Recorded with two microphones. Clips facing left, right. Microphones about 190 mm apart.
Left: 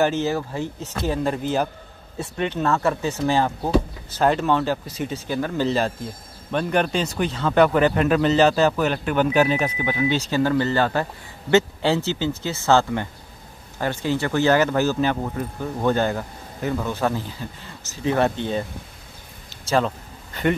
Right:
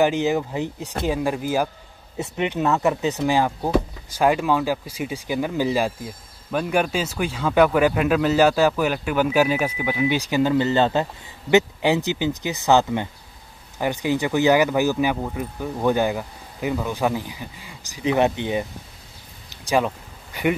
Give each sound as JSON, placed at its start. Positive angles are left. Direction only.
{"t": 0.0, "sound": "speech", "side_deg": -15}